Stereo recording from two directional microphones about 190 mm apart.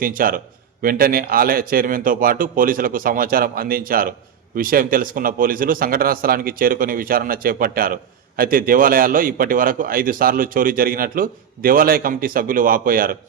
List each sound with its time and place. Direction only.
0.0 s a man's voice: 45° right (ahead or behind)